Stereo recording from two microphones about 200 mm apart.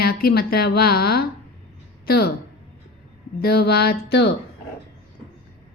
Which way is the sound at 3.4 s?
50° left (ahead or behind).